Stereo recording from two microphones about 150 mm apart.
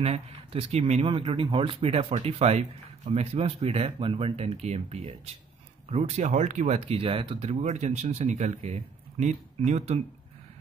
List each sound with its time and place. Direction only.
0.0 s speech: 40° right (ahead or behind)